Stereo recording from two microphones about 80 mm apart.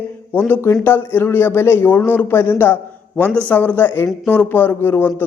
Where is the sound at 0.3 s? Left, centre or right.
Left.